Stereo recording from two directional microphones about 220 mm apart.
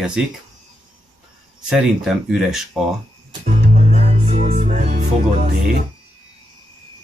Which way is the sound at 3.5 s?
30° right (ahead or behind).